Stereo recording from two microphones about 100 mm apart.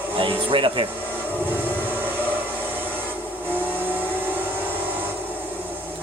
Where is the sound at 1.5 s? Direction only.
20° right (ahead or behind).